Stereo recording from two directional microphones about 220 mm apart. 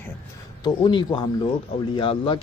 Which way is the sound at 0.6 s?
20° left (ahead or behind).